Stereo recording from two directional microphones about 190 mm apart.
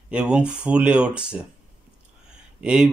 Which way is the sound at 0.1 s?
5° right (ahead or behind).